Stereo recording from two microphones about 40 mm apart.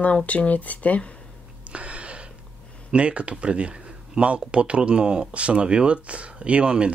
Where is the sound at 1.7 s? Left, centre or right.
Right.